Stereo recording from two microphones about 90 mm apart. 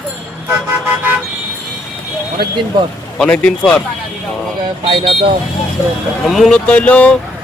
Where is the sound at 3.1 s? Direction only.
10° left (ahead or behind).